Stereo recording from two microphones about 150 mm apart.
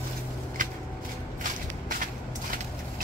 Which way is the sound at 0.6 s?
60° right (ahead or behind).